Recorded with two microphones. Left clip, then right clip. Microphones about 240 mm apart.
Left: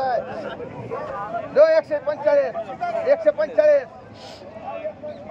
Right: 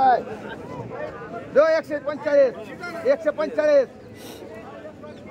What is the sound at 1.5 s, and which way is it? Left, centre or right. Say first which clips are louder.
A man's voice: left 3 dB; right.